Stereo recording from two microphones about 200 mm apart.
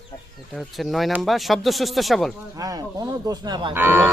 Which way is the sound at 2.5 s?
15° right (ahead or behind).